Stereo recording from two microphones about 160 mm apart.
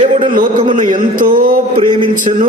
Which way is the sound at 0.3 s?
50° right (ahead or behind).